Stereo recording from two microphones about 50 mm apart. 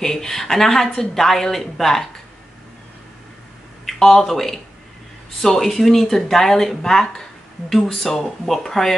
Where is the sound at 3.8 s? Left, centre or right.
Centre.